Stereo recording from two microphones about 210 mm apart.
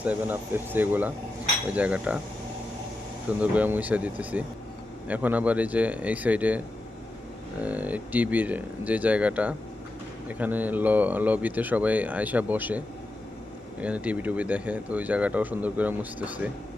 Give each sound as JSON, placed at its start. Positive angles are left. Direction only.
{"t": 0.0, "sound": "speech", "side_deg": -10}
{"t": 1.7, "sound": "cutlery", "side_deg": -5}
{"t": 3.2, "sound": "speech", "side_deg": -5}
{"t": 7.6, "sound": "speech", "side_deg": -5}
{"t": 13.8, "sound": "speech", "side_deg": -5}